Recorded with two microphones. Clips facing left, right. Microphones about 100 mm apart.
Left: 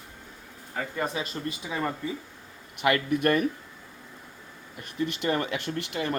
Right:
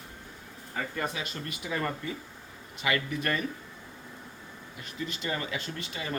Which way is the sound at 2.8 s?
60° left (ahead or behind).